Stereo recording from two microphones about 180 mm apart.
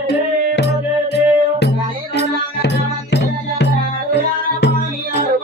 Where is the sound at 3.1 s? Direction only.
75° left (ahead or behind).